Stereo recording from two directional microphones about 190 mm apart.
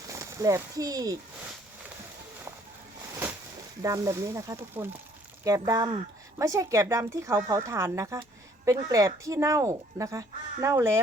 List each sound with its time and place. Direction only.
0.1 s speech: 15° right (ahead or behind)
3.8 s speech: 15° right (ahead or behind)